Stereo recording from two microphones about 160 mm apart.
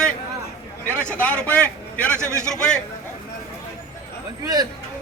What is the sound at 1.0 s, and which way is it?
A man's voice, 10° left (ahead or behind).